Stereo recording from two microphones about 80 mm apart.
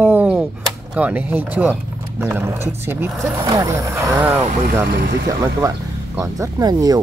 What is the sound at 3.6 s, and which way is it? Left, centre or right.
Speech, right.